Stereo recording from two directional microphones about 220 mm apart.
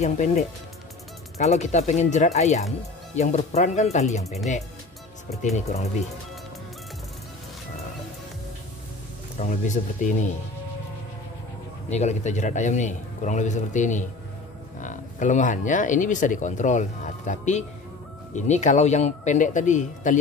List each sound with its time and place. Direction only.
0.0 s speech: 30° left (ahead or behind)
5.6 s speech: 30° left (ahead or behind)
9.4 s speech: 35° left (ahead or behind)
11.9 s speech: 30° left (ahead or behind)